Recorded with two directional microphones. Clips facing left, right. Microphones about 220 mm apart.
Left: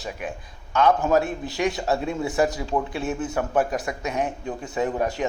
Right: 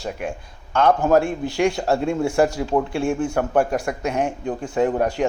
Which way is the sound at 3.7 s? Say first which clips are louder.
Right 4 dB; 55° right (ahead or behind).